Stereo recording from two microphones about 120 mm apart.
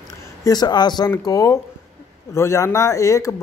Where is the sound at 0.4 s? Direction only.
35° left (ahead or behind).